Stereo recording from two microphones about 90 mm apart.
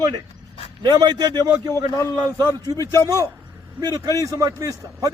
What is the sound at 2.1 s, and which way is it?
A man's voice, 50° right (ahead or behind).